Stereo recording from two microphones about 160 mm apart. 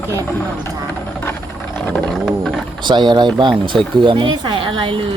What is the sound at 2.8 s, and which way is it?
Speech, 25° right (ahead or behind).